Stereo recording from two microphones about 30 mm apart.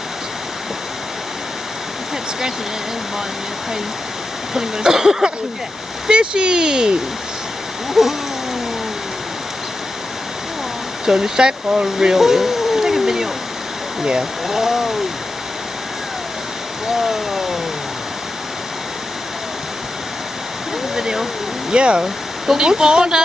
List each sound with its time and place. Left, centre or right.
4.6 s speech: right
8.0 s speech: centre
11.1 s speech: right
14.5 s speech: centre
16.8 s stream: centre
20.9 s a sound: centre
21.7 s speech: right